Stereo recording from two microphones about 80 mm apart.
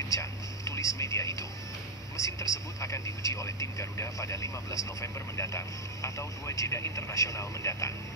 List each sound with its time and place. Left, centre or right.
0.1 s a sound: left
2.1 s vehicle: left
6.0 s speech: left